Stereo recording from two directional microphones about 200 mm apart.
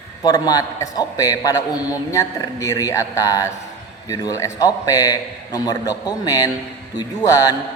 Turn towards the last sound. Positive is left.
turn(degrees=20)  # may be behind; listen again after turning